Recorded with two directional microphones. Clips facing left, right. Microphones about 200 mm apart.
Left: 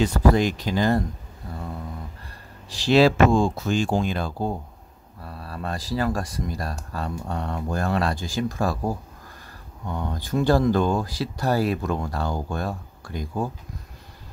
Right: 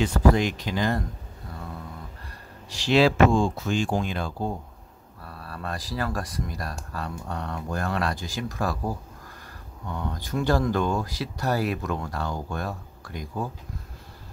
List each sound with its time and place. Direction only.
0.0 s speech: 35° left (ahead or behind)
2.7 s speech: 35° left (ahead or behind)
5.2 s speech: 25° left (ahead or behind)
10.3 s speech: 30° left (ahead or behind)